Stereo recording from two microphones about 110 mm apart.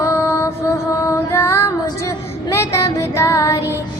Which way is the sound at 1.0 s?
25° left (ahead or behind).